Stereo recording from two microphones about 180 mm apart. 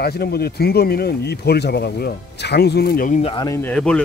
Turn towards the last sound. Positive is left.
turn(degrees=5)  # may be behind; listen again after turning